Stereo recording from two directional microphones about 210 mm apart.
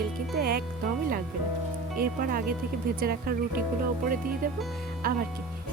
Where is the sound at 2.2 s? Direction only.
45° right (ahead or behind).